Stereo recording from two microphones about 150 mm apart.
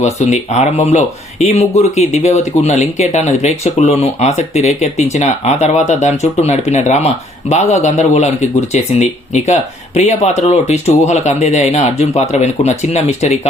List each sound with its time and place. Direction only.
0.0 s speech: 50° left (ahead or behind)